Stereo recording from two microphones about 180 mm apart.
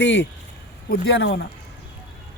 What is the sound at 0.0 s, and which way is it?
Speech, 80° left.